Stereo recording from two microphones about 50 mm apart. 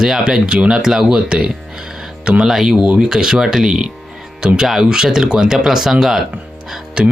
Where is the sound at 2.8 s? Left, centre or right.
Right.